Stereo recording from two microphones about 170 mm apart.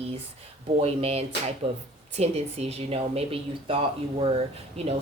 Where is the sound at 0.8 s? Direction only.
35° right (ahead or behind).